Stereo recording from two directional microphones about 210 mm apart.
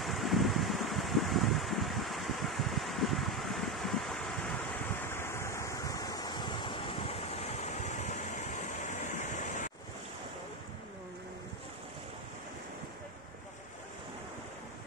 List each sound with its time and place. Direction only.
0.0 s a sound: centre (ahead or behind)
5.1 s waves: 10° left (ahead or behind)
7.6 s waterfall: 35° left (ahead or behind)